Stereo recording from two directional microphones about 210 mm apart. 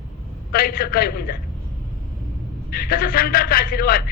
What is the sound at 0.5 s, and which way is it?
Speech, 45° left (ahead or behind).